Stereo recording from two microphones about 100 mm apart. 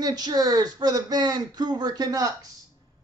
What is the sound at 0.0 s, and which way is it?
A woman's voice, 45° right (ahead or behind).